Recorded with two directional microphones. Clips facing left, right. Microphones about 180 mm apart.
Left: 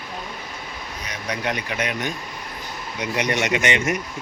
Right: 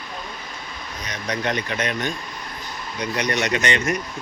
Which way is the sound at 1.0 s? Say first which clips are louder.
Right 2 dB; 10° left (ahead or behind).